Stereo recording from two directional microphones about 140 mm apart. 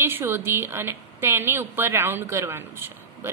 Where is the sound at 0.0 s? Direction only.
15° right (ahead or behind).